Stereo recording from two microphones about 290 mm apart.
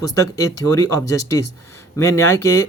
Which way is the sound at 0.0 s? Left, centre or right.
Centre.